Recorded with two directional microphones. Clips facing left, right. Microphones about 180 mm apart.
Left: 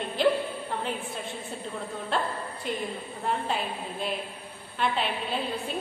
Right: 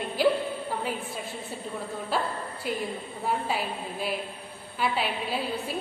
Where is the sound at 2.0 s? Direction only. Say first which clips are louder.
Even; 5° right (ahead or behind).